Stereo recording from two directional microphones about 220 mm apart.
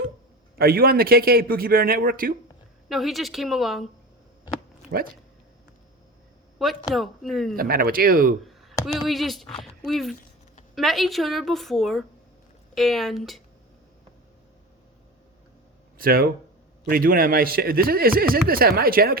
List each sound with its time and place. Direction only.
0.6 s speech: 45° right (ahead or behind)
2.9 s a woman's voice: centre (ahead or behind)
4.9 s speech: 40° right (ahead or behind)
6.6 s a woman's voice: centre (ahead or behind)
7.5 s speech: 40° right (ahead or behind)
8.9 s a woman's voice: centre (ahead or behind)
16.0 s speech: 40° right (ahead or behind)